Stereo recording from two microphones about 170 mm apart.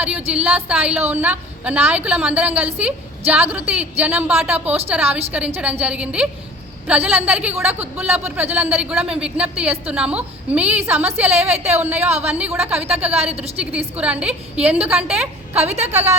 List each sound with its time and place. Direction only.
0.3 s a man's voice: 10° right (ahead or behind)
12.0 s a woman's voice: 40° right (ahead or behind)
12.3 s a man's voice: 10° right (ahead or behind)
15.5 s a woman's voice: 40° right (ahead or behind)